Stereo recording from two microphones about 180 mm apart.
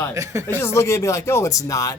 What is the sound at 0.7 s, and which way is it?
Speech, 15° left (ahead or behind).